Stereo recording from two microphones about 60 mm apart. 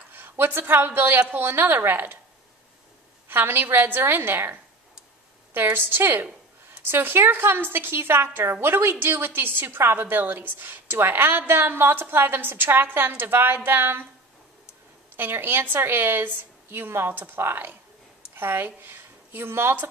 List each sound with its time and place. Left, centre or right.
0.1 s a woman's voice: right
3.3 s a woman's voice: right
15.1 s a woman's voice: right